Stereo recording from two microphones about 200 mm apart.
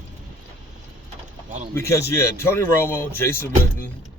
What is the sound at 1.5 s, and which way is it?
Speech, 35° right (ahead or behind).